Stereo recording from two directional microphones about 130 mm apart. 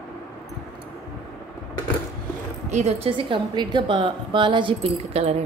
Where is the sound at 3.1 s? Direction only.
35° right (ahead or behind).